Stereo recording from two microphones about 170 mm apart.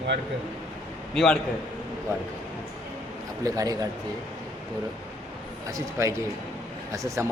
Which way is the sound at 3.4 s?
20° right (ahead or behind).